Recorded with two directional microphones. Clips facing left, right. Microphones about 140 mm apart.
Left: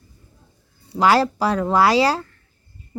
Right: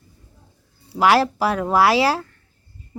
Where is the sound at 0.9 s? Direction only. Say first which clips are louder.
Even; 5° right (ahead or behind).